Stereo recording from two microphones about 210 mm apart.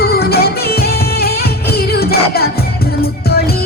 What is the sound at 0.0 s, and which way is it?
Music, 50° left (ahead or behind).